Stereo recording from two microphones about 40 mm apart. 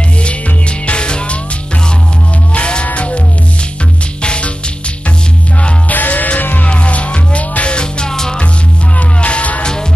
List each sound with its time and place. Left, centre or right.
0.2 s music: left
2.5 s music: left
4.2 s music: left
5.9 s music: left
6.7 s music: left; by 8.4 s centre
8.9 s music: left